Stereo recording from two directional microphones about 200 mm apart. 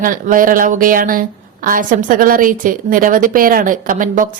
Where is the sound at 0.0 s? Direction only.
45° right (ahead or behind).